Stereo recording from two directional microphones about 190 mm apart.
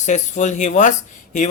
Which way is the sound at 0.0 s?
40° left (ahead or behind).